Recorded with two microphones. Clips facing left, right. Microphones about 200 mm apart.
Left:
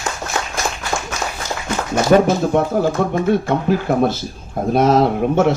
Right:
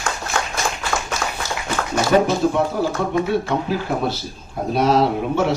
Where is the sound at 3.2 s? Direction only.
50° left (ahead or behind).